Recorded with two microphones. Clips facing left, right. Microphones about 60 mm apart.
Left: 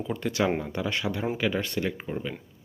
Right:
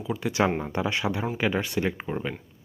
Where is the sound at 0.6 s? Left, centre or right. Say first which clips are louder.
Right 2 dB; right.